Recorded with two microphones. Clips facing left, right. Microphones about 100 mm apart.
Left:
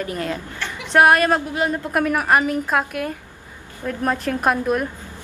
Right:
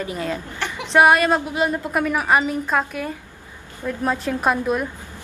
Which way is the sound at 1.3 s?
15° right (ahead or behind).